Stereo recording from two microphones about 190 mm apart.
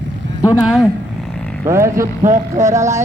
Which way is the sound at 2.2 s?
40° right (ahead or behind).